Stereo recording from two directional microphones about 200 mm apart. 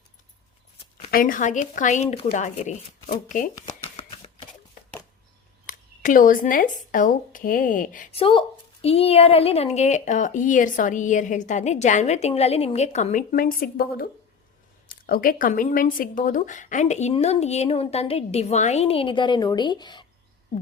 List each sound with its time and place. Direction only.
1.1 s speech: 45° left (ahead or behind)
5.6 s speech: 40° left (ahead or behind)
8.1 s a woman's voice: 25° left (ahead or behind)